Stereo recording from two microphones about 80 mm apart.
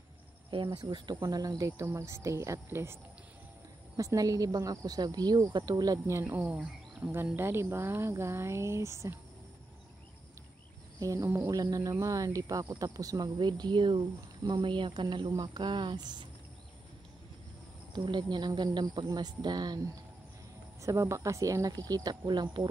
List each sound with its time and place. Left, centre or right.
0.7 s speech: right
1.2 s a woman's voice: right
1.8 s speech: right
3.9 s a woman's voice: right
6.2 s speech: centre; by 9.1 s right
11.0 s speech: right
17.9 s speech: right
20.8 s a woman's voice: right